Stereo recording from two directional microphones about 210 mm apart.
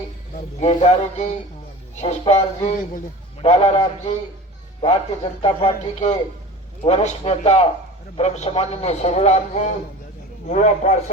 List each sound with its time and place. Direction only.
0.6 s a man's voice: 30° left (ahead or behind)
5.4 s a man's voice: 25° left (ahead or behind)